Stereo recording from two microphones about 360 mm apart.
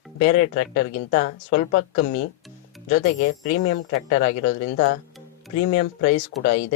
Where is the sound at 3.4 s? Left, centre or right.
Left.